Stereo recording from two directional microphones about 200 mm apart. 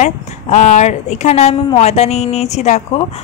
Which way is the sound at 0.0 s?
35° left (ahead or behind).